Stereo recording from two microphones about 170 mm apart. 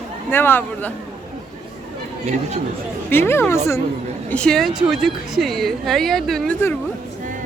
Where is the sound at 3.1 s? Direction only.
15° left (ahead or behind).